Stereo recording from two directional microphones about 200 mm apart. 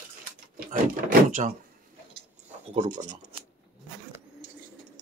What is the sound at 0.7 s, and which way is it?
Speech, 40° right (ahead or behind).